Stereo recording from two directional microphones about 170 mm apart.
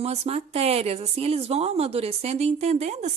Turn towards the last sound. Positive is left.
turn(degrees=-40)  # may be behind; listen again after turning